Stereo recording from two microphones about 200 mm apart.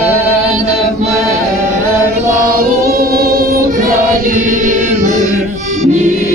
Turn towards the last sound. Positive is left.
turn(degrees=-35)  # may be behind; listen again after turning